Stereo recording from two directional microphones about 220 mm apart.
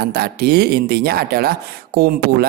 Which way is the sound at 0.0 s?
45° right (ahead or behind).